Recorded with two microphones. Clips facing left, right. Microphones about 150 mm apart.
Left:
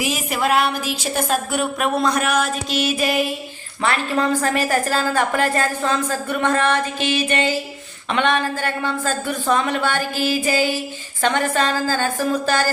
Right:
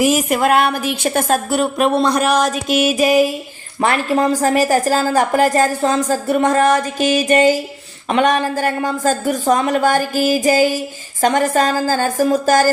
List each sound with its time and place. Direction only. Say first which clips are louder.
0.0 s a woman's voice: right 7 dB; 45° right (ahead or behind)
1.5 s a woman's voice: right 5 dB; 35° right (ahead or behind)
2.6 s a woman's voice: right 6 dB; 45° right (ahead or behind)